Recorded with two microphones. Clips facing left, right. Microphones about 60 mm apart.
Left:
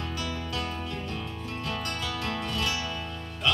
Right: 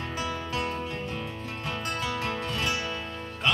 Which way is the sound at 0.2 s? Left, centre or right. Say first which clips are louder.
Right 5 dB; right.